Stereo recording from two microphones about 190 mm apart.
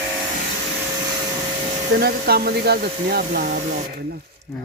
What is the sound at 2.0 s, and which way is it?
Speech, 55° right (ahead or behind).